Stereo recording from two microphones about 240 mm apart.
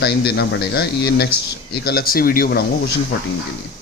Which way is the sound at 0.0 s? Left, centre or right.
Left.